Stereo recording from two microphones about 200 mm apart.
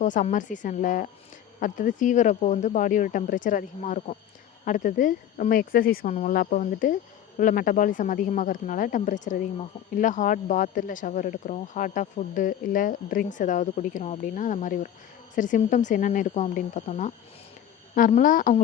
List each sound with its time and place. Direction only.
0.0 s speech: 40° left (ahead or behind)